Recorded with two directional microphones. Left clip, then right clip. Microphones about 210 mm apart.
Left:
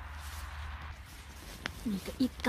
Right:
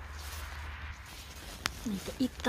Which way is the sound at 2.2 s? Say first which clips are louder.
Left 1 dB; centre (ahead or behind).